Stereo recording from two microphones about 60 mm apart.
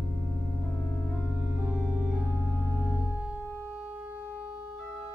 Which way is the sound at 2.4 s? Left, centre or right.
Right.